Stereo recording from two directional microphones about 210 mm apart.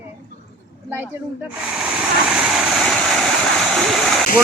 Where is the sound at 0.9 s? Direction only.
10° right (ahead or behind).